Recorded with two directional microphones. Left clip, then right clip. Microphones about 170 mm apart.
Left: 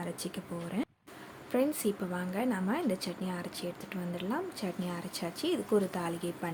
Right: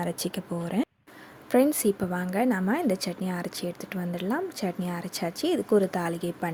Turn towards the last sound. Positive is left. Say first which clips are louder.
# right 6 dB
turn(degrees=-30)  # may be behind; listen again after turning